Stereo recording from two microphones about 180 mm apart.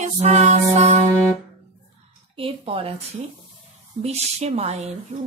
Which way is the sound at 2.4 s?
30° right (ahead or behind).